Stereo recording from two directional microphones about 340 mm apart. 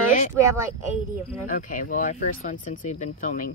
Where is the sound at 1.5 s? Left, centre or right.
Left.